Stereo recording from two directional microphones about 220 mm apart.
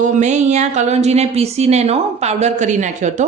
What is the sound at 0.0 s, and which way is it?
A woman's voice, 35° right (ahead or behind).